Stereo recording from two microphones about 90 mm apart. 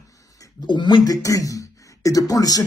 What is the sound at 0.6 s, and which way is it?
Speech, 55° left (ahead or behind).